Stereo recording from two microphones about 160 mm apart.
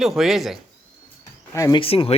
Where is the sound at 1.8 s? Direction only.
35° left (ahead or behind).